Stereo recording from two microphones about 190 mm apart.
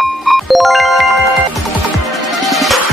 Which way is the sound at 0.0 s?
Centre (ahead or behind).